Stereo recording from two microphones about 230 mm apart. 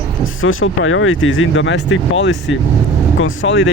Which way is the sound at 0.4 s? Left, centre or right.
Left.